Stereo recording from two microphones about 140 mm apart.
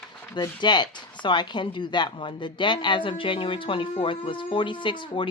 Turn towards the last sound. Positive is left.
turn(degrees=35)  # may be behind; listen again after turning